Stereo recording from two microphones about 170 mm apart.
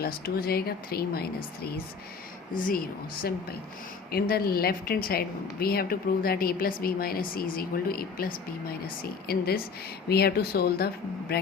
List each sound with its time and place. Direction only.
0.0 s a woman's voice: 65° left (ahead or behind)
2.6 s a woman's voice: 55° left (ahead or behind)
4.1 s a woman's voice: 65° left (ahead or behind)